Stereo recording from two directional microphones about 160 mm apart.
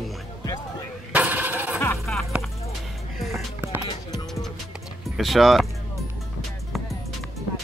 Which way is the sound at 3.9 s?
25° left (ahead or behind).